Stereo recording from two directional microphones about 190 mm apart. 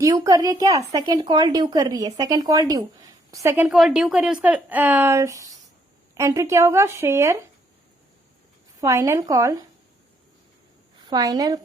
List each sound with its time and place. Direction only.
0.0 s a woman's voice: 20° right (ahead or behind)
8.8 s a woman's voice: 15° right (ahead or behind)
11.1 s a woman's voice: 20° right (ahead or behind)